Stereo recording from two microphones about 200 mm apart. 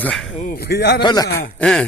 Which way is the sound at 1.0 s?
20° left (ahead or behind).